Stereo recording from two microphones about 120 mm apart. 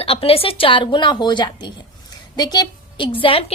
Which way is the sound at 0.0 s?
55° left (ahead or behind).